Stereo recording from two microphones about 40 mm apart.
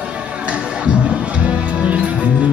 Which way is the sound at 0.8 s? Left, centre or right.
Right.